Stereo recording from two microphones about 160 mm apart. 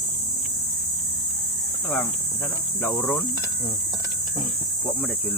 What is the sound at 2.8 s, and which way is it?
Speech, 10° left (ahead or behind).